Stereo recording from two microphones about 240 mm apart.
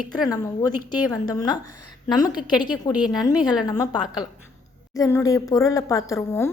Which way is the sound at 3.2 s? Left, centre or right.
Centre.